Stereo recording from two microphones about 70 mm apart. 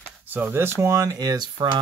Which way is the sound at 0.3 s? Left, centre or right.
Right.